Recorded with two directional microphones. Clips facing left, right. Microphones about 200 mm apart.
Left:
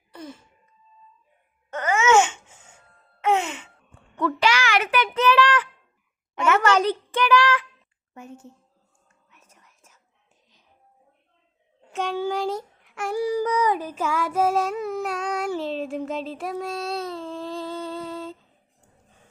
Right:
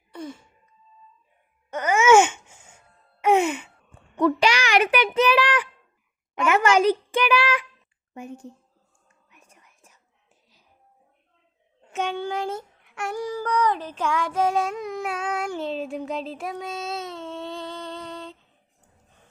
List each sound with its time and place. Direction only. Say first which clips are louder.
1.7 s babbling: right 1 dB; 10° right (ahead or behind)
3.2 s wail: right 3 dB; 10° right (ahead or behind)
4.4 s child singing: right 2 dB; 15° right (ahead or behind)
6.4 s a sound: right 1 dB; 10° right (ahead or behind)
8.1 s a woman's voice: right 4 dB; 15° right (ahead or behind)
9.3 s whispering: right 1 dB; 10° right (ahead or behind)
11.8 s humming: left 1 dB; centre (ahead or behind)